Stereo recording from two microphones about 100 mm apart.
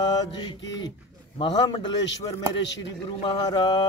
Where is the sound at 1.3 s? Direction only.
60° left (ahead or behind).